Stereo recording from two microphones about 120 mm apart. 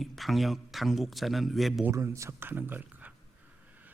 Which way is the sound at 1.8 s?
20° right (ahead or behind).